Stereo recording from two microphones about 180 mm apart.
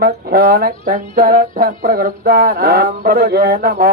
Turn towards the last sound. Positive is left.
turn(degrees=-55)  # may be behind; listen again after turning